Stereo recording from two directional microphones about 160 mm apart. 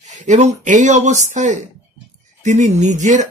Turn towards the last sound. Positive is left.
turn(degrees=-50)  # may be behind; listen again after turning